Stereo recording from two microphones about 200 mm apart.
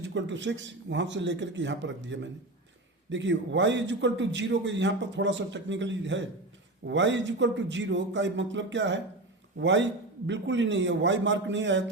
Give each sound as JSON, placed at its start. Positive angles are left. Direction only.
{"t": 0.0, "sound": "a man's voice", "side_deg": -65}